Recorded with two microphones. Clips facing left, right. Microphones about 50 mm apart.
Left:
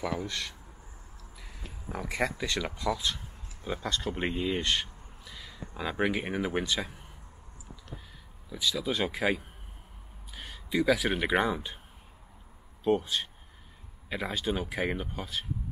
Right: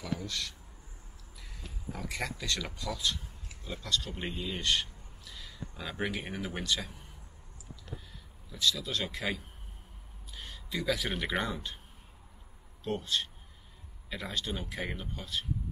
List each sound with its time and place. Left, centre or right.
0.0 s speech: left
1.9 s speech: left
4.5 s a sound: left
5.3 s speech: centre
8.5 s speech: centre
10.3 s speech: centre
12.8 s speech: centre